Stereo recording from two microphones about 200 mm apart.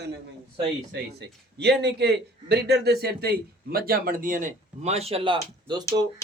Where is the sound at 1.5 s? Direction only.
55° right (ahead or behind).